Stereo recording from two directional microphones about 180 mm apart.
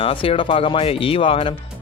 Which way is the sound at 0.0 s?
30° left (ahead or behind).